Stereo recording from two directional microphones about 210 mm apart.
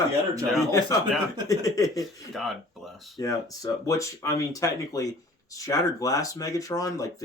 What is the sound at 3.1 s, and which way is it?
Speech, 15° left (ahead or behind).